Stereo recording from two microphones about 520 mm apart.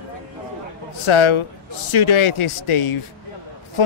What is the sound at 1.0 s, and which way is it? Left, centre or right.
A man's voice, left.